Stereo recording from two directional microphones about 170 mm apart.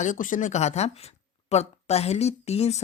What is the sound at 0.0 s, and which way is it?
Speech, 50° left (ahead or behind).